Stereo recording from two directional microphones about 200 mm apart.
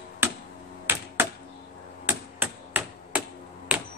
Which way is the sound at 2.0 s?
10° right (ahead or behind).